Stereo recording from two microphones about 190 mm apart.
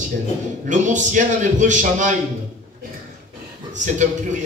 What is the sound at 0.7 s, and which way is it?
A man's voice, 40° right (ahead or behind).